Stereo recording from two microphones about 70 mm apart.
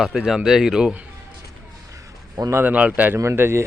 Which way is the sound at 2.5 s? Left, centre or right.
Right.